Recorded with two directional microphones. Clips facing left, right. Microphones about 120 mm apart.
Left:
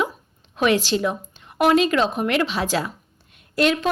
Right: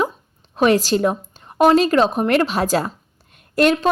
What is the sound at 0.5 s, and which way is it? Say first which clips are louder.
A woman's voice: right 4 dB; 40° right (ahead or behind).